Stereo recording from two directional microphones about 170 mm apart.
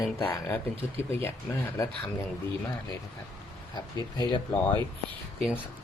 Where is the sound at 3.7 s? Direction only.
25° left (ahead or behind).